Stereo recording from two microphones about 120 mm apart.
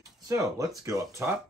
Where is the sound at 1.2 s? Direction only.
20° right (ahead or behind).